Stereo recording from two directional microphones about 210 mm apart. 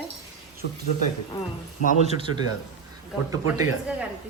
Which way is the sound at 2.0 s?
25° right (ahead or behind).